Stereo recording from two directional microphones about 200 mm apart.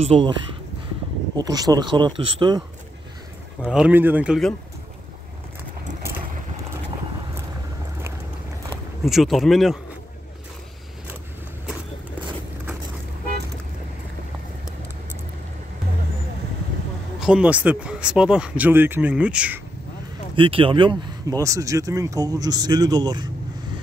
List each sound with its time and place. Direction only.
0.0 s speech: 30° right (ahead or behind)
1.3 s speech: 20° right (ahead or behind)
3.6 s speech: 5° right (ahead or behind)
9.0 s speech: centre (ahead or behind)
17.2 s speech: 5° right (ahead or behind)
20.3 s speech: 25° right (ahead or behind)